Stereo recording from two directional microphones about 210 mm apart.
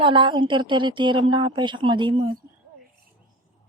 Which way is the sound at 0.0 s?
25° right (ahead or behind).